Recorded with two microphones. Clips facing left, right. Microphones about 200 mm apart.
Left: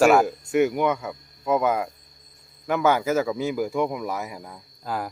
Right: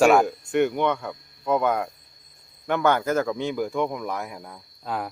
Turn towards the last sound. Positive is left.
turn(degrees=0)  # may be behind; listen again after turning